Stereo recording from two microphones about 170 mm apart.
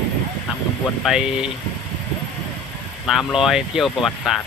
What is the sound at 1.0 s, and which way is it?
Speech, 5° right (ahead or behind).